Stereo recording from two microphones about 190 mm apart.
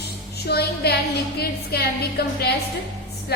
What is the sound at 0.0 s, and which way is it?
Music, 60° left (ahead or behind).